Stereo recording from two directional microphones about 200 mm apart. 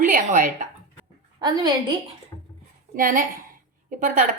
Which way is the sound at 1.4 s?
20° right (ahead or behind).